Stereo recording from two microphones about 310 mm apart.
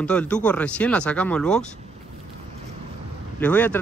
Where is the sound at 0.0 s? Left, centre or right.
Centre.